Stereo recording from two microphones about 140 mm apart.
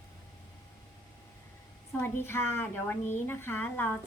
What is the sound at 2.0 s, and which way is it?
A woman's voice, 15° left (ahead or behind).